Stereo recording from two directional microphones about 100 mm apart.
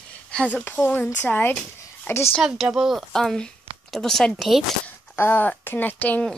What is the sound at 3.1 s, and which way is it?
Speech, 5° left (ahead or behind).